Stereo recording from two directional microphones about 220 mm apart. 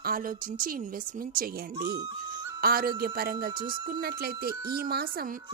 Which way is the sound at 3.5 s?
20° right (ahead or behind).